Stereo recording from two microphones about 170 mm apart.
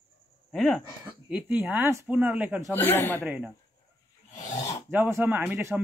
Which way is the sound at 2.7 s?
10° left (ahead or behind).